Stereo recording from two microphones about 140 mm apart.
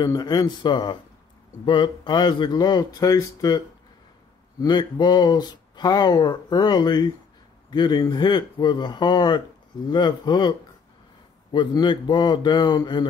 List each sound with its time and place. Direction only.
0.0 s speech: 25° left (ahead or behind)
11.5 s speech: 35° left (ahead or behind)